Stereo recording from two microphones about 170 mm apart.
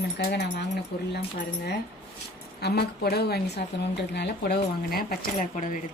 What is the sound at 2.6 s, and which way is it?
A woman's voice, 75° left (ahead or behind).